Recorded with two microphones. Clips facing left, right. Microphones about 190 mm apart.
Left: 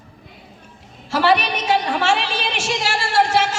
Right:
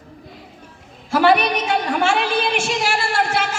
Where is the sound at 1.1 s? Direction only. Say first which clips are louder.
Right 2 dB; 55° right (ahead or behind).